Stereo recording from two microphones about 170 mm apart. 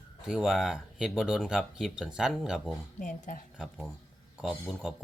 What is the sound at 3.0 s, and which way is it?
Speech, 50° left (ahead or behind).